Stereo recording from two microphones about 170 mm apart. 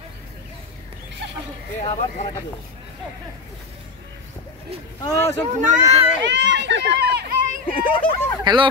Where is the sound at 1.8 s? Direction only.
45° left (ahead or behind).